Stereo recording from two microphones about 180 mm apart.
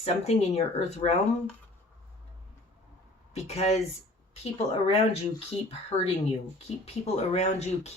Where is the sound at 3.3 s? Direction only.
35° left (ahead or behind).